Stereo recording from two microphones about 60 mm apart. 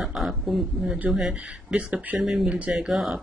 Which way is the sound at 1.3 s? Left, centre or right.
Right.